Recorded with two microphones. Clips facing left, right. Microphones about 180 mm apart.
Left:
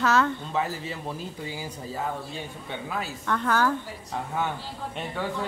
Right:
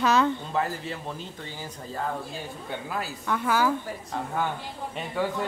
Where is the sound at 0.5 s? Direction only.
Centre (ahead or behind).